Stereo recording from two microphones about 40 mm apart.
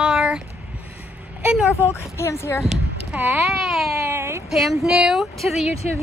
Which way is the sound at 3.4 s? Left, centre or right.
Centre.